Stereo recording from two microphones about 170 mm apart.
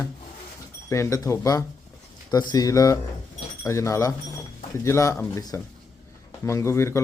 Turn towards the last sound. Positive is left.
turn(degrees=15)  # may be behind; listen again after turning